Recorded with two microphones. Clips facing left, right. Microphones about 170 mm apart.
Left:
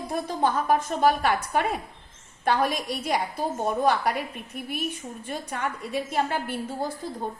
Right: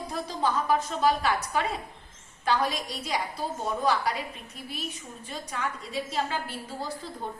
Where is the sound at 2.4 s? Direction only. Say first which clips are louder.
Left 3 dB; 55° left (ahead or behind).